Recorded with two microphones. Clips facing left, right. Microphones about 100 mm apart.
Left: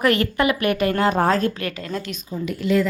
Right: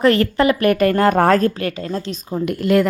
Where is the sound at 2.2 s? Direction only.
55° right (ahead or behind).